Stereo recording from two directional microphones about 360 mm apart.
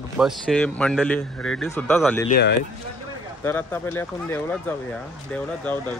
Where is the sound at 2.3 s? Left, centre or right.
Left.